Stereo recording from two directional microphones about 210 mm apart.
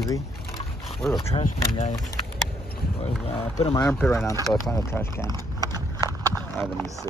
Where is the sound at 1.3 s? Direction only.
30° left (ahead or behind).